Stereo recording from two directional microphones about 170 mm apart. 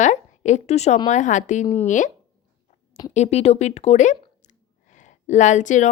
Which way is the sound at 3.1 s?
40° left (ahead or behind).